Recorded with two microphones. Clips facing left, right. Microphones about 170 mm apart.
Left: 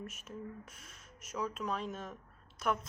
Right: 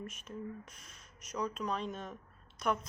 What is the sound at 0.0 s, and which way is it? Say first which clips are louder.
Speech: right 2 dB; 5° left (ahead or behind).